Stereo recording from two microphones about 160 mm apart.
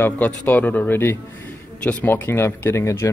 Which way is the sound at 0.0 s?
10° left (ahead or behind).